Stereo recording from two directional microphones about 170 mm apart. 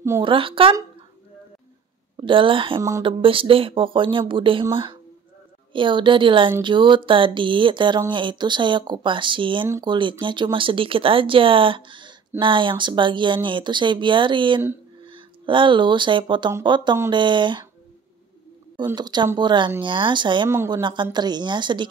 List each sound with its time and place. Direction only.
0.2 s speech: 30° right (ahead or behind)
2.1 s speech: 30° right (ahead or behind)
5.7 s speech: 30° right (ahead or behind)
18.9 s speech: 25° right (ahead or behind)
20.4 s speech: 15° right (ahead or behind)
20.7 s speech: 25° right (ahead or behind)